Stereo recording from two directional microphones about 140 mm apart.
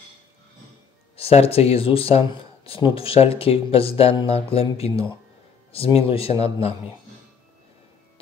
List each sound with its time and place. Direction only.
1.1 s speech: 45° left (ahead or behind)